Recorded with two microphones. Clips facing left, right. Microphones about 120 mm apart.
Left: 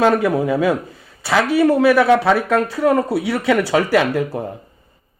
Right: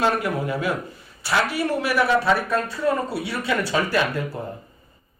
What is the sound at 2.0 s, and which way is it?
Speech, 85° left.